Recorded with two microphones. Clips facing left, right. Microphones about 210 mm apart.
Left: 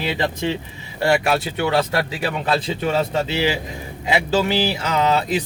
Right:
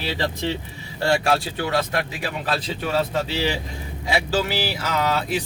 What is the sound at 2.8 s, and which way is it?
Speech, 20° left (ahead or behind).